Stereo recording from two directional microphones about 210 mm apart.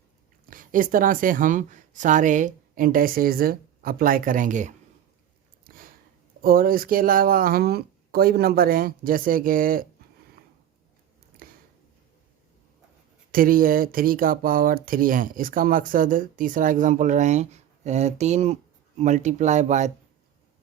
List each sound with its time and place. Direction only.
0.5 s speech: 40° right (ahead or behind)
5.6 s sniff: 40° right (ahead or behind)
6.4 s speech: 45° right (ahead or behind)
11.4 s a sound: 45° right (ahead or behind)
13.3 s speech: 45° right (ahead or behind)